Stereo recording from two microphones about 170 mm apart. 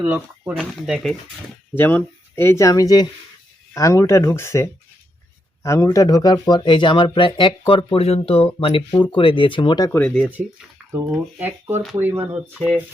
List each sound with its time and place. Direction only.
0.0 s speech: 10° right (ahead or behind)
0.5 s speech: centre (ahead or behind)
1.7 s speech: 10° left (ahead or behind)
10.4 s speech: 5° left (ahead or behind)
11.1 s speech: 15° right (ahead or behind)